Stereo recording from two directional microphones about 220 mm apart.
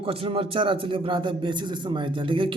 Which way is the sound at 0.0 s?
25° right (ahead or behind).